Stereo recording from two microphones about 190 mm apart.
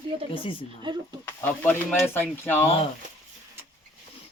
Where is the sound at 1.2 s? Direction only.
10° left (ahead or behind).